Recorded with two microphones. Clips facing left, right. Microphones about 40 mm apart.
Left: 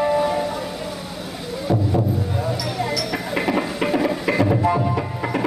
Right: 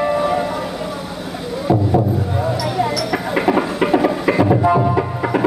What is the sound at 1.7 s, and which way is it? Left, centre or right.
Music, centre.